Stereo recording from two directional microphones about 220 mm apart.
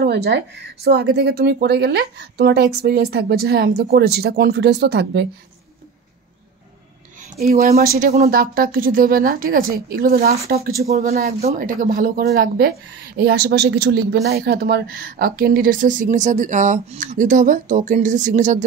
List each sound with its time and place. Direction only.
0.0 s a sound: 45° right (ahead or behind)
0.8 s speech: 45° right (ahead or behind)
7.3 s a woman's voice: 45° right (ahead or behind)